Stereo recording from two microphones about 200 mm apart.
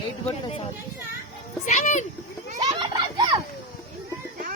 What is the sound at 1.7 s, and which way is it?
Speech, 35° left (ahead or behind).